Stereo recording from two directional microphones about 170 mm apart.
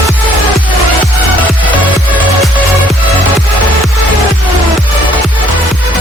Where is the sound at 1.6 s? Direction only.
10° right (ahead or behind).